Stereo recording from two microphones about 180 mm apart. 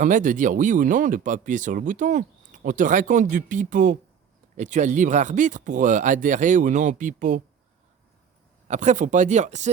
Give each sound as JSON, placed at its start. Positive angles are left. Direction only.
{"t": 0.0, "sound": "speech", "side_deg": -45}
{"t": 8.6, "sound": "speech", "side_deg": -40}